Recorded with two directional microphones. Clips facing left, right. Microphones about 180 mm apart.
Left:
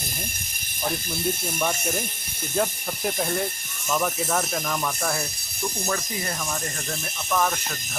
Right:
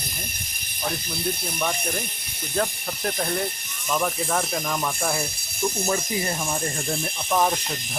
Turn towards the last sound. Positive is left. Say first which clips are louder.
# right 2 dB
turn(degrees=-25)  # may be behind; listen again after turning